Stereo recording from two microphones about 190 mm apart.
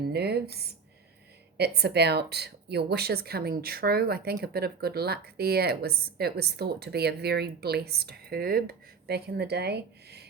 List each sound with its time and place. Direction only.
0.1 s a woman's voice: 55° right (ahead or behind)